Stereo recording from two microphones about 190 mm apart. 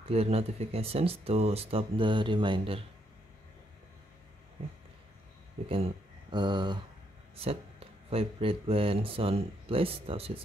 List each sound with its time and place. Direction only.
0.1 s speech: 35° right (ahead or behind)
6.3 s speech: 25° right (ahead or behind)